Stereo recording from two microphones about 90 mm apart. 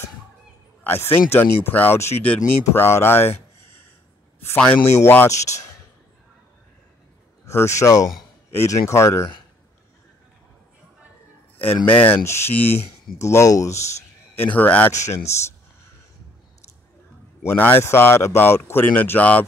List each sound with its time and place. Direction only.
0.8 s speech: 25° left (ahead or behind)
4.8 s speech: 25° left (ahead or behind)
7.4 s speech: 35° left (ahead or behind)
11.6 s a man's voice: 20° left (ahead or behind)
14.9 s speech: 30° left (ahead or behind)
17.5 s speech: 20° left (ahead or behind)